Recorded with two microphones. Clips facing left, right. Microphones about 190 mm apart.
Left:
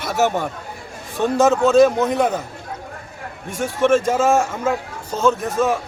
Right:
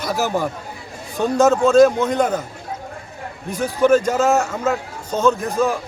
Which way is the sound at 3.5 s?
5° left (ahead or behind).